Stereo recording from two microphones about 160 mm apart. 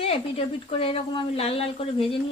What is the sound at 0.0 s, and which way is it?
Speech, 35° left (ahead or behind).